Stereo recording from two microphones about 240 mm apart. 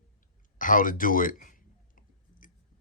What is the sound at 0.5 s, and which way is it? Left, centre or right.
Speech, left.